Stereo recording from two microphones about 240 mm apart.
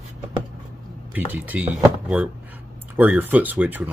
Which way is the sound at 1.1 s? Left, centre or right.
Centre.